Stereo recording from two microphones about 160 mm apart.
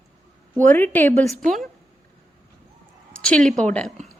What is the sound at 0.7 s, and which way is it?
Speech, 10° left (ahead or behind).